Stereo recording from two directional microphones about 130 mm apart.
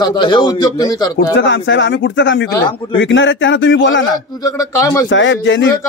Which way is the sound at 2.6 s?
40° left (ahead or behind).